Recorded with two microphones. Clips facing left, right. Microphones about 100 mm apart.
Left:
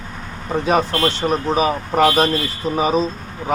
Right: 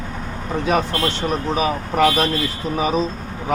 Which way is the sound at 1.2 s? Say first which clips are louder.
Left 3 dB; 25° left (ahead or behind).